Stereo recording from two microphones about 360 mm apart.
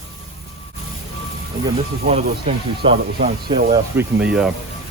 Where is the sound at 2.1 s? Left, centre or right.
Centre.